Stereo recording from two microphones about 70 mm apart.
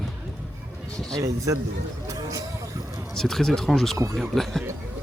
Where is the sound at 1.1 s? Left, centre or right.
Right.